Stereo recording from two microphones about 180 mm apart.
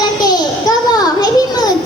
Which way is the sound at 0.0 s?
20° left (ahead or behind).